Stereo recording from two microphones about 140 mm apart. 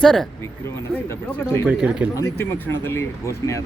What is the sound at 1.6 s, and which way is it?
Speech, 10° right (ahead or behind).